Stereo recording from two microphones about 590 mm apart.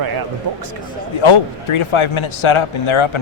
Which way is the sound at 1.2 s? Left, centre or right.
Left.